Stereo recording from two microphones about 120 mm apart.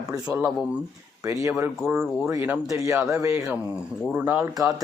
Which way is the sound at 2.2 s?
20° right (ahead or behind).